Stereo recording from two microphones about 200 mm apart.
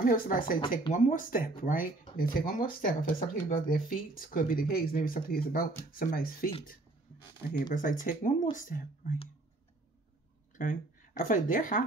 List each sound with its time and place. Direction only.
0.0 s speech: 45° left (ahead or behind)
7.7 s speech: 40° left (ahead or behind)
10.5 s speech: 40° left (ahead or behind)